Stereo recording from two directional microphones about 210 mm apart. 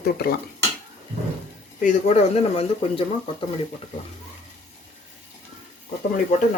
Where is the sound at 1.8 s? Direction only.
35° left (ahead or behind).